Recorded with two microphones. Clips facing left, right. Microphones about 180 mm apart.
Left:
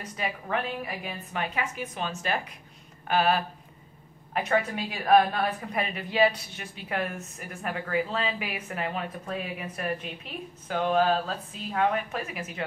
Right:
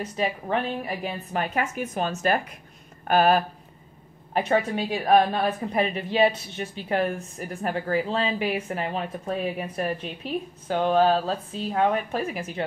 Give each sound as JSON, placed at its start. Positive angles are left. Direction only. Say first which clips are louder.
{"t": 0.0, "sound": "a woman's voice", "louder": "right 6 dB", "side_deg": -25}
{"t": 4.3, "sound": "a woman's voice", "louder": "right 3 dB", "side_deg": -30}